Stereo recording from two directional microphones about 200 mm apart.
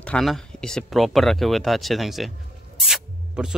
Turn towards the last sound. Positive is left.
turn(degrees=-5)  # may be behind; listen again after turning